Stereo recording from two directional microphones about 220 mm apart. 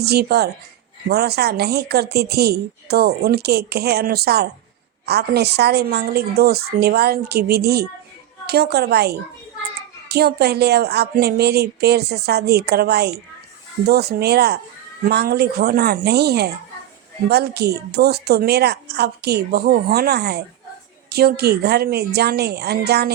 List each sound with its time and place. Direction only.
0.0 s a woman's voice: 45° right (ahead or behind)